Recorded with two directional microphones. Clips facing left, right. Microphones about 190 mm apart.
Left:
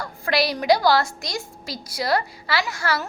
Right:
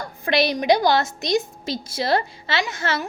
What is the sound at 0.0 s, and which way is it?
A woman's voice, 20° right (ahead or behind).